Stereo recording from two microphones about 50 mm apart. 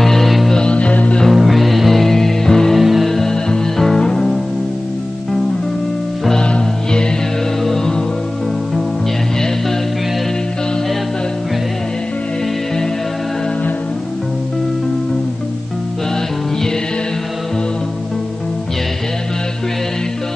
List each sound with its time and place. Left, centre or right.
0.0 s music: centre
0.6 s music: left
1.3 s music: centre
2.8 s music: centre
3.1 s music: centre
6.4 s music: centre